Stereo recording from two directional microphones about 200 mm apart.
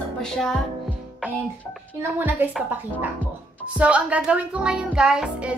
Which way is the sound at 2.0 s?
10° right (ahead or behind).